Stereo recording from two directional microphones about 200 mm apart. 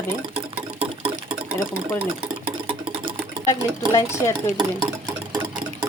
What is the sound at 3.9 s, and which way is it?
Speech, 15° left (ahead or behind).